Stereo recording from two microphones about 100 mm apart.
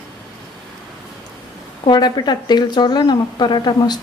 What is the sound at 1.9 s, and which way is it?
A woman's voice, 45° left (ahead or behind).